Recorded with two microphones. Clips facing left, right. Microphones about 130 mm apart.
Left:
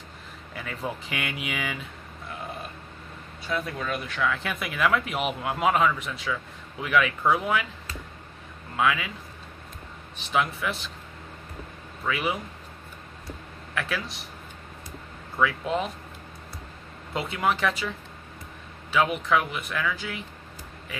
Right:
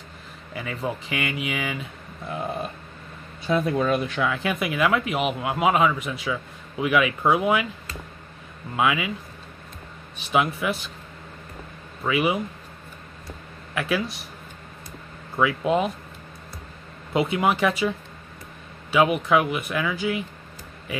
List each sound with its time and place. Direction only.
0.5 s speech: 5° right (ahead or behind)
3.4 s speech: 25° right (ahead or behind)
4.3 s a man's voice: 5° right (ahead or behind)
8.7 s a man's voice: 10° right (ahead or behind)
10.1 s a man's voice: 10° right (ahead or behind)
12.1 s a man's voice: 10° right (ahead or behind)
13.7 s a man's voice: 10° right (ahead or behind)
15.3 s a man's voice: 10° right (ahead or behind)
17.1 s a man's voice: 10° right (ahead or behind)